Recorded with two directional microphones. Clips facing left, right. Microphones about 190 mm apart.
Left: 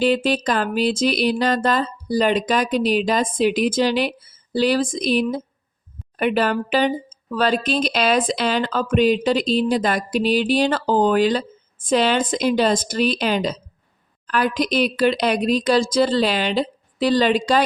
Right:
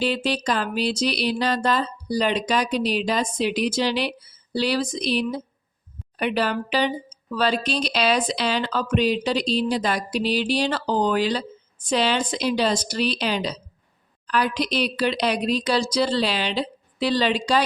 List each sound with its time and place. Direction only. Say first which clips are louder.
0.0 s speech: left 5 dB; 50° left (ahead or behind)